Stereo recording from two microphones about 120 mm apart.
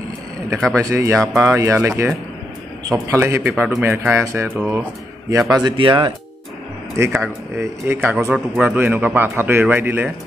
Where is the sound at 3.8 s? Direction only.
20° right (ahead or behind).